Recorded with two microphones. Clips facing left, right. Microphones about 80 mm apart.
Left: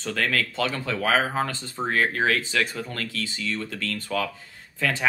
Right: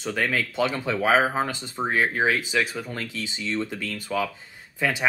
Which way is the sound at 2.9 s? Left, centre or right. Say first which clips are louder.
Left 1 dB; centre.